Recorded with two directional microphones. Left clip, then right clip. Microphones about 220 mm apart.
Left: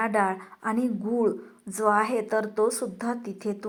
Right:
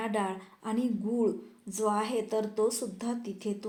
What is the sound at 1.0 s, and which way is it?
A woman's voice, 15° left (ahead or behind).